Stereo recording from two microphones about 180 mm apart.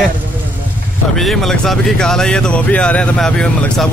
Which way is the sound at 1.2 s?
Centre (ahead or behind).